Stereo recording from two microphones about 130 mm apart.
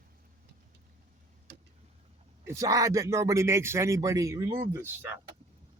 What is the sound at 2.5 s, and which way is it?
Speech, 25° right (ahead or behind).